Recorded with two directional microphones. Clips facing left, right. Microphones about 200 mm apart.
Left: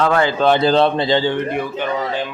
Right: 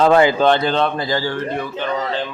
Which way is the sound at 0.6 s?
35° left (ahead or behind).